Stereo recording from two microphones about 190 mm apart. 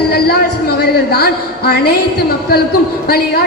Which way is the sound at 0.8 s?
55° left (ahead or behind).